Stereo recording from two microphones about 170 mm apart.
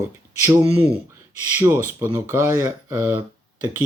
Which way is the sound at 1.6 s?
15° right (ahead or behind).